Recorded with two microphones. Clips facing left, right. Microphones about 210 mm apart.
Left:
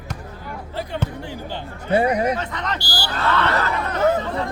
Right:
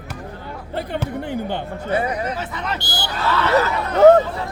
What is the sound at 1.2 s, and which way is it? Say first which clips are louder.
Speech: right 6 dB; 55° right (ahead or behind).